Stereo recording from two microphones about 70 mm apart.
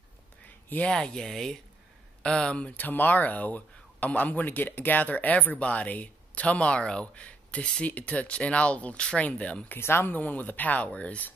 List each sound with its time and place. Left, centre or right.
0.7 s speech: left
0.9 s speech: centre
9.8 s speech: left